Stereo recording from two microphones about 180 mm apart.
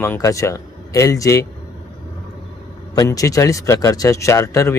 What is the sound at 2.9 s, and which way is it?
Speech, 20° left (ahead or behind).